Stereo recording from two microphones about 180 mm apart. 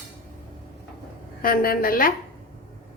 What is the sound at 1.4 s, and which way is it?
Speech, 55° left (ahead or behind).